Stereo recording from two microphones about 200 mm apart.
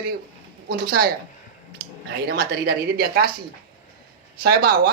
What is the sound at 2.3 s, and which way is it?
Speech, 50° right (ahead or behind).